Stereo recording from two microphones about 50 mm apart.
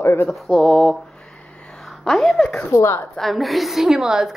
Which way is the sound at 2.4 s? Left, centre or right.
Left.